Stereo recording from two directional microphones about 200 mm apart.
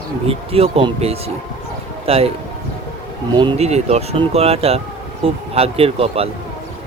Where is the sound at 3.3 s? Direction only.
25° right (ahead or behind).